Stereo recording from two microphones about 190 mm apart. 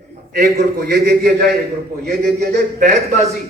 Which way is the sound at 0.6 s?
55° right (ahead or behind).